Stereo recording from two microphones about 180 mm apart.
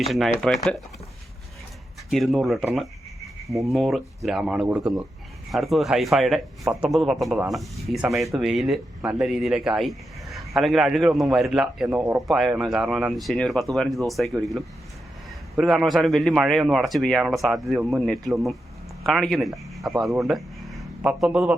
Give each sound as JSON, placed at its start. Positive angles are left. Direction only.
{"t": 0.1, "sound": "a man's voice", "side_deg": 0}
{"t": 2.0, "sound": "a man's voice", "side_deg": 0}
{"t": 3.7, "sound": "a man's voice", "side_deg": 0}
{"t": 11.9, "sound": "speech", "side_deg": -15}
{"t": 12.3, "sound": "a man's voice", "side_deg": 0}